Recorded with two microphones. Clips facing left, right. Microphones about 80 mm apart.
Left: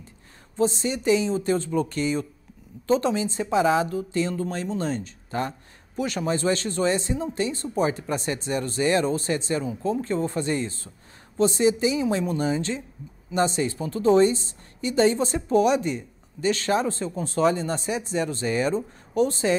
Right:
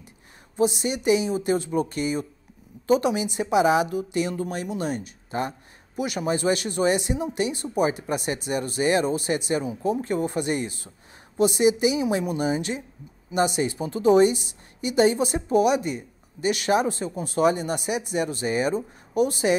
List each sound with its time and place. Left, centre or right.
0.6 s a woman's voice: centre